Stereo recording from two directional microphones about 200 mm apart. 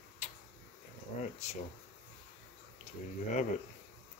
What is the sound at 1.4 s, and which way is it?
Speech, 35° left (ahead or behind).